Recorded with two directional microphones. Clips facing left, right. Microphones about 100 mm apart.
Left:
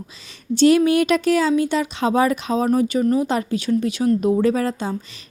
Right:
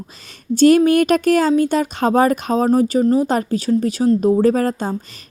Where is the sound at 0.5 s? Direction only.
45° right (ahead or behind).